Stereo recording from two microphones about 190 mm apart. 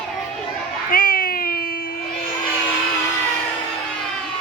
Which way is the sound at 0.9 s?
50° left (ahead or behind).